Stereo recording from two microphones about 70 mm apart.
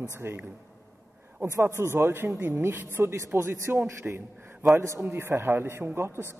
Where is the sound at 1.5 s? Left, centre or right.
Right.